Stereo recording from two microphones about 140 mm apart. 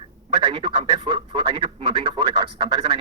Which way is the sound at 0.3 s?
35° right (ahead or behind).